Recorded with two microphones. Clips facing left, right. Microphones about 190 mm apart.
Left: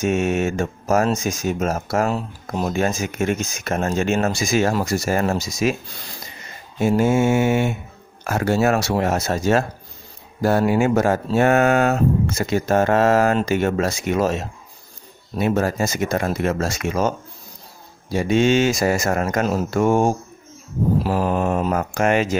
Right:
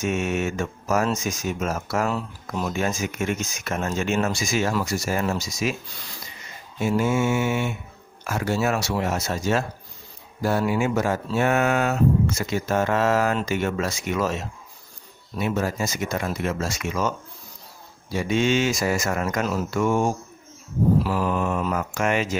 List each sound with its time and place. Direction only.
0.0 s speech: 35° left (ahead or behind)
4.3 s speech: 55° left (ahead or behind)
6.8 s speech: 40° left (ahead or behind)
18.1 s speech: 40° left (ahead or behind)